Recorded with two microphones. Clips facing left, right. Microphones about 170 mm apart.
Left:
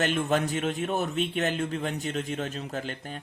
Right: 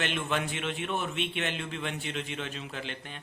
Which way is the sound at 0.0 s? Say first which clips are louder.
Left 6 dB; 40° left (ahead or behind).